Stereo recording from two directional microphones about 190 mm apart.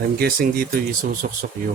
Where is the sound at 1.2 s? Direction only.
45° right (ahead or behind).